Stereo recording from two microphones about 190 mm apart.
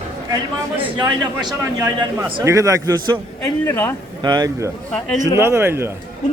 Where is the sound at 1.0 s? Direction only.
20° right (ahead or behind).